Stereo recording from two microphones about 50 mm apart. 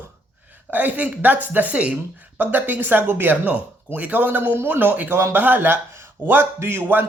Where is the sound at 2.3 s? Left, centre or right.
Right.